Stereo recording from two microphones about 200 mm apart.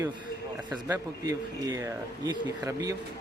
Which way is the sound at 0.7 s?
10° right (ahead or behind).